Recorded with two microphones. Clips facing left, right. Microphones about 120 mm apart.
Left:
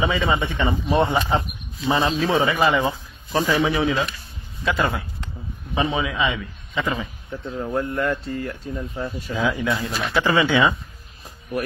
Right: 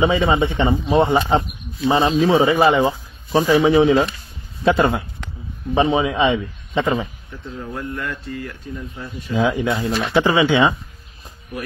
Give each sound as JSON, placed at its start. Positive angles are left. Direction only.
{"t": 0.0, "sound": "speech", "side_deg": -20}
{"t": 7.7, "sound": "speech", "side_deg": 30}
{"t": 9.3, "sound": "speech", "side_deg": -25}
{"t": 10.0, "sound": "speech", "side_deg": -15}